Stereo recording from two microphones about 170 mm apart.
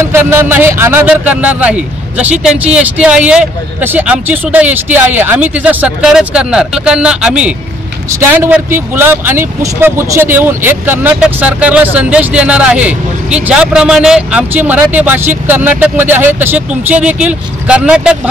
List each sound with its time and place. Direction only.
0.1 s speech: 15° right (ahead or behind)